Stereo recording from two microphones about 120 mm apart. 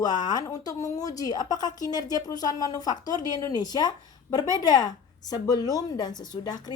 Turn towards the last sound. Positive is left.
turn(degrees=35)  # may be behind; listen again after turning